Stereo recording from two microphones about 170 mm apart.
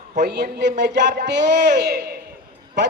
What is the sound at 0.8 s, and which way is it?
A man's voice, 85° right.